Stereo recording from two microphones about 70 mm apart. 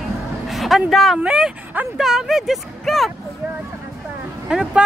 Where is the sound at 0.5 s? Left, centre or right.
Centre.